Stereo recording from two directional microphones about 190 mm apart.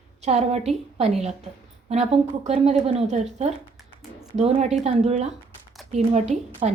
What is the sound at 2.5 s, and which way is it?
A woman's voice, 35° right (ahead or behind).